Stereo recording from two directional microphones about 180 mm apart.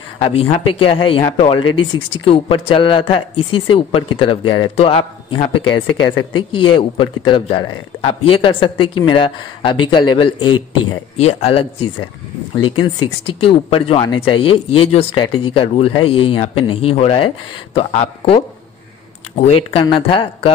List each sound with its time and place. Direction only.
0.2 s speech: 30° left (ahead or behind)
19.4 s speech: 30° left (ahead or behind)